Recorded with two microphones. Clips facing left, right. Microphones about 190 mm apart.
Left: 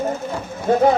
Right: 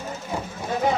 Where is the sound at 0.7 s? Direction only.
55° left (ahead or behind).